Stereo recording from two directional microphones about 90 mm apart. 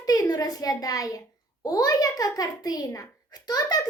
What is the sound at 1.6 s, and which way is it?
A child's voice, 45° left (ahead or behind).